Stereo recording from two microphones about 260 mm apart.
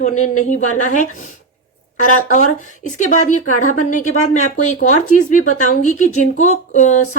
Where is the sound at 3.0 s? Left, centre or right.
Left.